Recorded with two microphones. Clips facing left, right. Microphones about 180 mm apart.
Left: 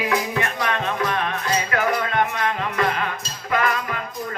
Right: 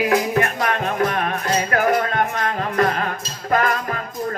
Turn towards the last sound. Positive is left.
turn(degrees=-45)  # may be behind; listen again after turning